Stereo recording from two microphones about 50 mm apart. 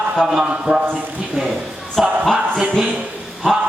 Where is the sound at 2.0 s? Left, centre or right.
Centre.